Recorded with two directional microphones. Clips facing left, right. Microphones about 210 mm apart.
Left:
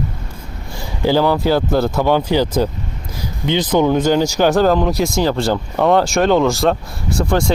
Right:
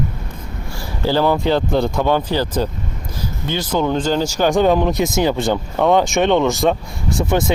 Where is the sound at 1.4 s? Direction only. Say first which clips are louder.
Left 1 dB; 5° left (ahead or behind).